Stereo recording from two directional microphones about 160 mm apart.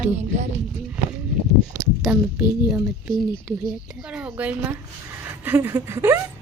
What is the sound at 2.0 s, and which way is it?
Speech, 5° right (ahead or behind).